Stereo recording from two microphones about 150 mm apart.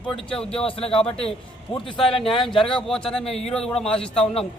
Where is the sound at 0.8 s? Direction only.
40° left (ahead or behind).